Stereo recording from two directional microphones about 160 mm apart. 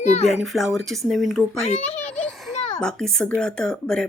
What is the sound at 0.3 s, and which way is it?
Speech, centre (ahead or behind).